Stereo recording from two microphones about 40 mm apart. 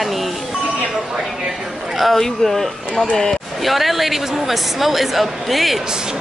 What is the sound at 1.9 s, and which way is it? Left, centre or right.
A woman's voice, centre.